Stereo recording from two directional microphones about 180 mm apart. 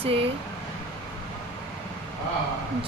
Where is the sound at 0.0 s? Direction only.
30° right (ahead or behind).